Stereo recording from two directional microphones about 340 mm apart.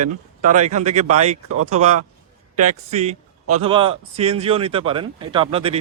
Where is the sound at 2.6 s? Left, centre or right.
Centre.